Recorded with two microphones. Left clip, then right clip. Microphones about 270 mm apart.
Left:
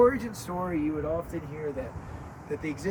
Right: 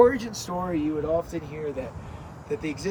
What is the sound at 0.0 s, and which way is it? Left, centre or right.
Speech, centre.